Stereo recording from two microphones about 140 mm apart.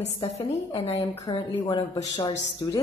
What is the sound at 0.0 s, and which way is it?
Speech, 50° left (ahead or behind).